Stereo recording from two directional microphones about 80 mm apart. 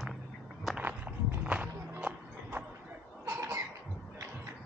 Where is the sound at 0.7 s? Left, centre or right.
Centre.